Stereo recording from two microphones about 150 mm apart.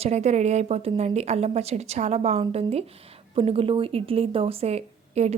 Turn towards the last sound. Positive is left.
turn(degrees=-45)  # may be behind; listen again after turning